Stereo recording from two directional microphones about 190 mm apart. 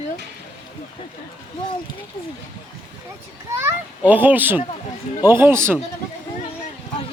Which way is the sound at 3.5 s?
10° right (ahead or behind).